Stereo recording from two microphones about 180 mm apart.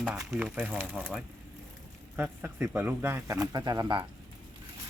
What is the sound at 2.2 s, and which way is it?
Speech, 15° right (ahead or behind).